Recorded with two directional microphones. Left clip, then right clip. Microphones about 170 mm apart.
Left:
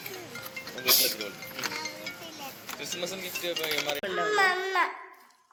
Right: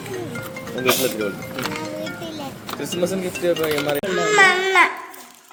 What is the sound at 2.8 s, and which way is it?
Speech, 50° right (ahead or behind).